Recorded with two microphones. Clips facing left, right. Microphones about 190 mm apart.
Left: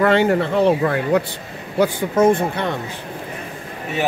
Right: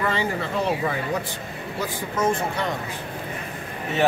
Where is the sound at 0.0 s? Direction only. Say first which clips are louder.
Left 10 dB; 65° left (ahead or behind).